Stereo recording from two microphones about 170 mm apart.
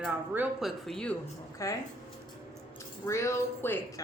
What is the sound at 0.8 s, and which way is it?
Speech, 5° left (ahead or behind).